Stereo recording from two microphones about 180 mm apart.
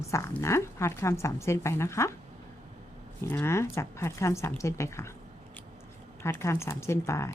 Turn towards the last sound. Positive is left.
turn(degrees=15)  # may be behind; listen again after turning